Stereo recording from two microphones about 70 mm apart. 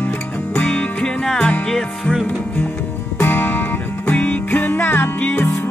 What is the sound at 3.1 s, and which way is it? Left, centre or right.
Music, left.